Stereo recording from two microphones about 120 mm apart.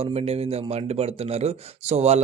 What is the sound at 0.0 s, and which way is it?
A man's voice, 55° right (ahead or behind).